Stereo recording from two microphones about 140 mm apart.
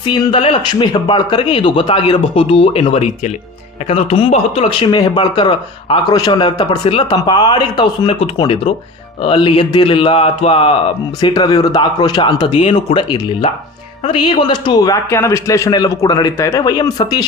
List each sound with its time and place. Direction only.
0.1 s speech: 40° left (ahead or behind)
11.2 s a man's voice: 30° left (ahead or behind)